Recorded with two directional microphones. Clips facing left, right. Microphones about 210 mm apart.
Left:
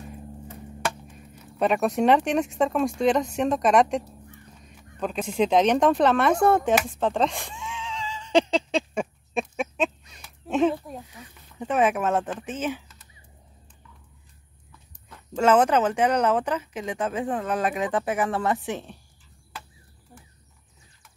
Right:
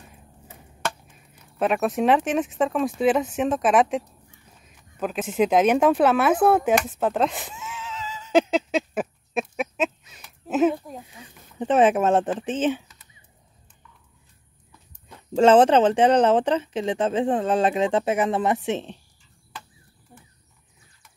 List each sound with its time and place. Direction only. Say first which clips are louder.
1.1 s speech: left 6 dB; centre (ahead or behind)
4.6 s caw: left 5 dB; centre (ahead or behind)
4.9 s speech: right 2 dB; 5° right (ahead or behind)
6.9 s a sound: right 1 dB; 5° right (ahead or behind)
11.6 s speech: right 4 dB; 30° right (ahead or behind)
15.3 s speech: right 4 dB; 30° right (ahead or behind)